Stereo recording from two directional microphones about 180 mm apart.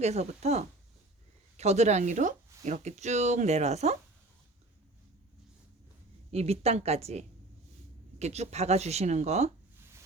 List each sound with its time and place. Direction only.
0.0 s speech: 35° right (ahead or behind)
6.3 s speech: 35° right (ahead or behind)